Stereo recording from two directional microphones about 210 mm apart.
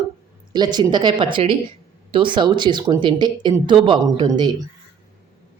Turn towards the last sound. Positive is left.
turn(degrees=-20)  # may be behind; listen again after turning